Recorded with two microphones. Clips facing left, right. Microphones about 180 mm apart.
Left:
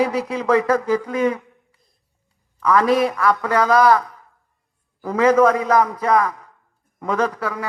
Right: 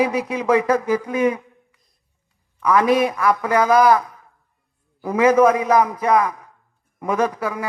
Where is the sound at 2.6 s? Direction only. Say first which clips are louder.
Even; 20° right (ahead or behind).